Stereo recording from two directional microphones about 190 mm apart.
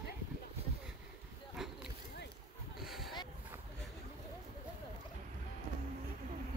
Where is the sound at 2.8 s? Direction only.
Centre (ahead or behind).